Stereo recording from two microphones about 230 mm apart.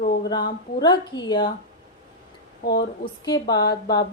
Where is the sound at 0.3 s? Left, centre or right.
Centre.